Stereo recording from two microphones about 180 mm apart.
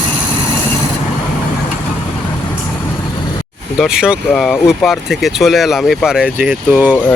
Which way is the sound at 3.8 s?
5° right (ahead or behind).